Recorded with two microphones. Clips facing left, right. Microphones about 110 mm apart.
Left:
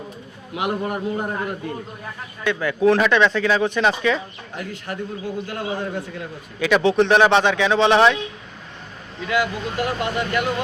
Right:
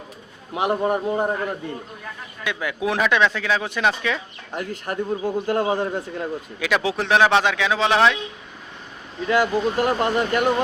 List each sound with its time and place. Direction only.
0.5 s speech: 35° right (ahead or behind)
2.4 s speech: 10° right (ahead or behind)
4.5 s a man's voice: 45° right (ahead or behind)
6.6 s speech: centre (ahead or behind)
9.2 s speech: 35° right (ahead or behind)